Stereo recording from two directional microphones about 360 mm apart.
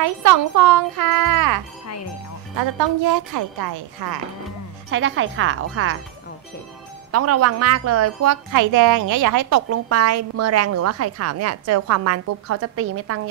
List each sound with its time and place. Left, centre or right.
0.2 s speech: right
3.0 s speech: right
4.9 s a woman's voice: right
7.1 s a woman's voice: right